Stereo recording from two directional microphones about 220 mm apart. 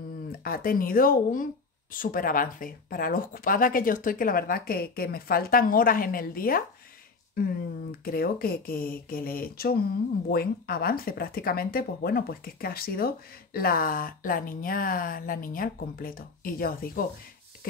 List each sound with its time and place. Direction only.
0.4 s speech: 40° left (ahead or behind)
8.0 s speech: 45° left (ahead or behind)